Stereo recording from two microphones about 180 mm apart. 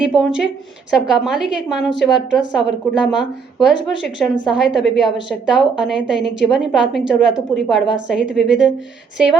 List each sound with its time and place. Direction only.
0.0 s a woman's voice: 5° right (ahead or behind)